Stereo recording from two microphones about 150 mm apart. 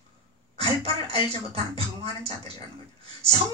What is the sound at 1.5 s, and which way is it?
A woman's voice, 40° right (ahead or behind).